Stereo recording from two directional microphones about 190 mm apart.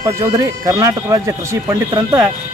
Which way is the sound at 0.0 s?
20° right (ahead or behind).